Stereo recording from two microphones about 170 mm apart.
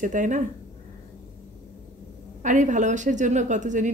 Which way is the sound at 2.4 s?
45° right (ahead or behind).